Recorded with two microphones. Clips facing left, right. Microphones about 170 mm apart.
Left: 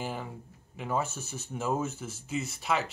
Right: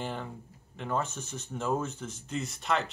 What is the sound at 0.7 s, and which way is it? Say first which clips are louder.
Speech: left 1 dB; 5° left (ahead or behind).